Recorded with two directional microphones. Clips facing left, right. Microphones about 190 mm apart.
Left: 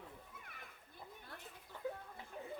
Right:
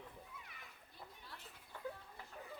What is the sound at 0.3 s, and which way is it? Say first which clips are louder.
Children playing: left 1 dB; 50° left (ahead or behind).